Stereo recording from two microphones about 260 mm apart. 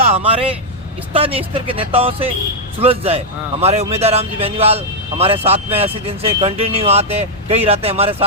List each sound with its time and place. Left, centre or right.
0.1 s a man's voice: right